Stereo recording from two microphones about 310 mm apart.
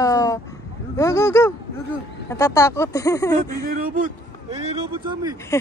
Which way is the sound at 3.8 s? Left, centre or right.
Right.